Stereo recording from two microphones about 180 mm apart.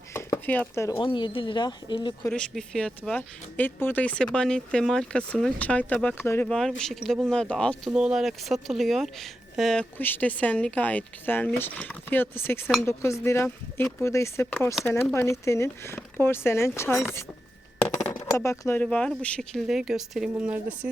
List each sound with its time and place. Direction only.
0.1 s a sound: 15° left (ahead or behind)
0.9 s speech: 30° left (ahead or behind)
2.2 s speech: 5° left (ahead or behind)
14.8 s speech: 5° left (ahead or behind)
15.1 s speech: 15° left (ahead or behind)
18.1 s speech: 20° left (ahead or behind); by 20.9 s 5° right (ahead or behind)